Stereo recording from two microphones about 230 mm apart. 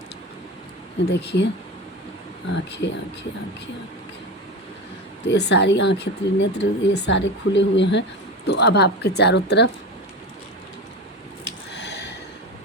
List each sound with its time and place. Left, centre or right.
1.0 s speech: left
2.5 s speech: left
5.2 s speech: left
11.4 s a sound: left